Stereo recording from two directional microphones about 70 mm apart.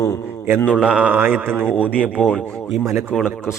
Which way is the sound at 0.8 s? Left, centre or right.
Centre.